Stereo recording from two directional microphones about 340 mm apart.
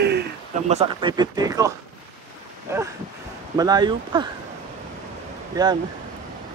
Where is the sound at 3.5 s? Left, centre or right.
Centre.